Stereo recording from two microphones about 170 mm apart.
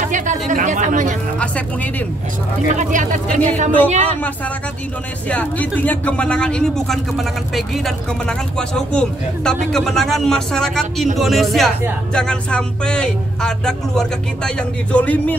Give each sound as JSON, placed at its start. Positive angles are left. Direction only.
{"t": 0.0, "sound": "chatter", "side_deg": -50}
{"t": 0.5, "sound": "speech", "side_deg": -45}
{"t": 1.4, "sound": "speech", "side_deg": 10}
{"t": 2.7, "sound": "speech", "side_deg": -45}
{"t": 5.3, "sound": "speech", "side_deg": 10}